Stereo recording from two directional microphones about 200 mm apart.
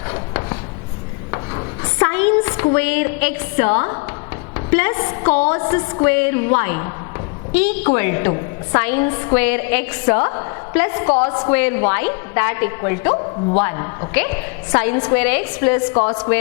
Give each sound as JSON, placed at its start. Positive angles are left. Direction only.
{"t": 0.1, "sound": "writing", "side_deg": 20}
{"t": 1.3, "sound": "a sound", "side_deg": 20}
{"t": 4.5, "sound": "a woman's voice", "side_deg": 15}
{"t": 11.3, "sound": "a woman's voice", "side_deg": 25}
{"t": 11.5, "sound": "a woman's voice", "side_deg": 10}